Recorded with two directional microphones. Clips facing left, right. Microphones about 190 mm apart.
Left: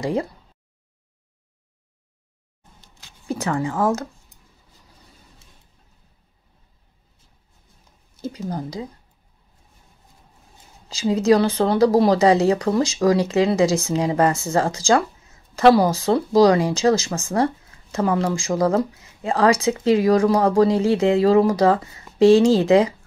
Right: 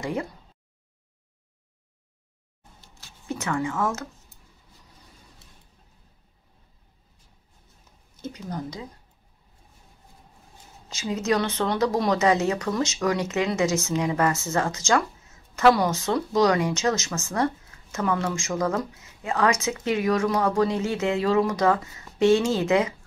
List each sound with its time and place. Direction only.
0.0 s speech: 35° left (ahead or behind)
3.3 s speech: 35° left (ahead or behind)
8.2 s speech: 30° left (ahead or behind)
10.9 s speech: 30° left (ahead or behind)